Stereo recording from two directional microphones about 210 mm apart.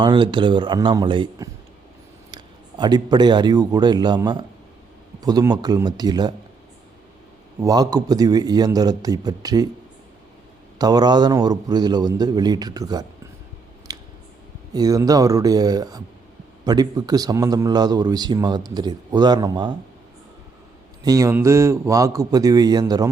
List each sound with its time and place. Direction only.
0.0 s a man's voice: 20° right (ahead or behind)
7.6 s speech: 15° right (ahead or behind)
10.8 s a man's voice: 20° right (ahead or behind)
13.9 s a sound: 20° right (ahead or behind)
14.7 s a man's voice: 15° right (ahead or behind)
21.0 s speech: 15° right (ahead or behind)